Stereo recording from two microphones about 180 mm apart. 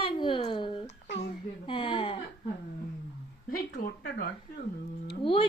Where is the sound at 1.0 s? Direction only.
70° left (ahead or behind).